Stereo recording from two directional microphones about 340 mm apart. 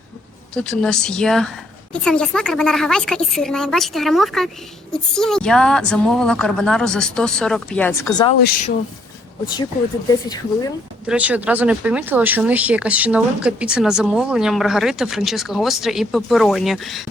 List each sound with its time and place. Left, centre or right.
0.5 s speech: centre
8.4 s speech: left
10.2 s speech: centre
11.0 s speech: centre